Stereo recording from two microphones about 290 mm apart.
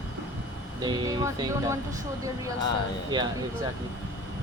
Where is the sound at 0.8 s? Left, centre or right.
Centre.